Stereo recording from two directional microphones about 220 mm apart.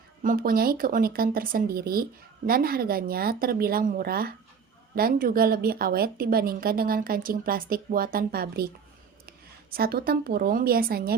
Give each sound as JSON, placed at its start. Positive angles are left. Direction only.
{"t": 0.2, "sound": "a woman's voice", "side_deg": -40}